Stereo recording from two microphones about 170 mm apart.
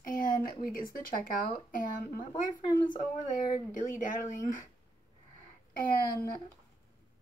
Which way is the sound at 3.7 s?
50° left (ahead or behind).